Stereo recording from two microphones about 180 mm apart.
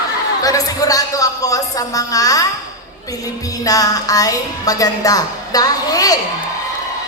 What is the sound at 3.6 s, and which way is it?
A woman's voice, 20° left (ahead or behind).